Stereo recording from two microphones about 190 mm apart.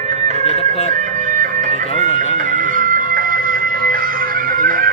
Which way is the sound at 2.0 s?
45° right (ahead or behind).